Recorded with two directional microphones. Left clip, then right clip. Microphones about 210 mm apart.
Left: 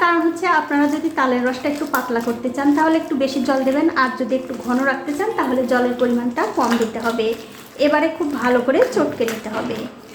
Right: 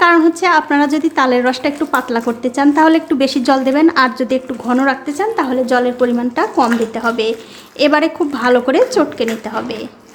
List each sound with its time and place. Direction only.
0.0 s a woman's voice: 35° right (ahead or behind)